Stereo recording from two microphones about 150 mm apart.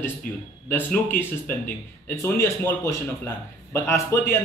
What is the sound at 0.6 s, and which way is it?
Speech, 15° left (ahead or behind).